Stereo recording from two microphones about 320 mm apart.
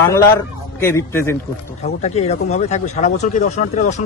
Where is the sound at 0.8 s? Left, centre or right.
Centre.